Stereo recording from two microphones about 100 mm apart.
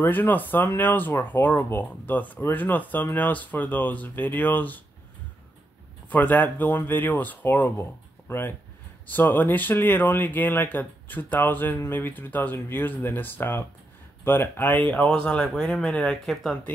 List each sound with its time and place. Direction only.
0.0 s speech: 20° left (ahead or behind)
6.0 s speech: 15° left (ahead or behind)